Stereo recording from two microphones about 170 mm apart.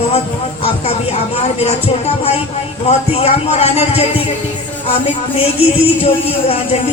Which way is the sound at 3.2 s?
35° left (ahead or behind).